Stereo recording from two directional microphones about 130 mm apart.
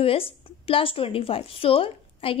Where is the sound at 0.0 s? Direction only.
45° left (ahead or behind).